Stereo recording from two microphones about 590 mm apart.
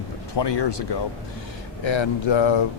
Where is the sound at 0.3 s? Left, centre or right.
Left.